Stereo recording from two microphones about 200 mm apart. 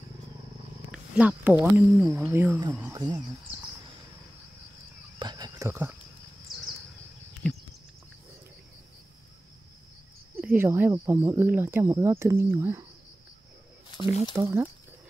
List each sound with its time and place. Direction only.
0.9 s speech: 5° right (ahead or behind)
5.2 s a sound: 20° right (ahead or behind)
7.4 s a sound: 5° left (ahead or behind)
10.4 s speech: 10° right (ahead or behind)
13.9 s snake: 25° left (ahead or behind)
14.3 s speech: 15° right (ahead or behind)